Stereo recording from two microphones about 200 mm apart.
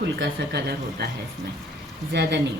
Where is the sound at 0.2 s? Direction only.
55° right (ahead or behind).